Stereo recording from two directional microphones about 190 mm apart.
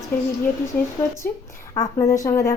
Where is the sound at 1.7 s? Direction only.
15° left (ahead or behind).